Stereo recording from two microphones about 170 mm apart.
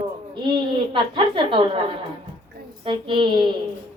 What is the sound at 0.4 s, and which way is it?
A woman's voice, 30° right (ahead or behind).